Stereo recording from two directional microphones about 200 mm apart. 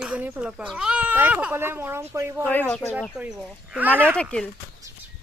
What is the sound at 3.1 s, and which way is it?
Speech, 5° right (ahead or behind).